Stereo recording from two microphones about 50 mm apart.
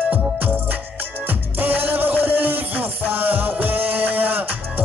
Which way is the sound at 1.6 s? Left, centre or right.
Right.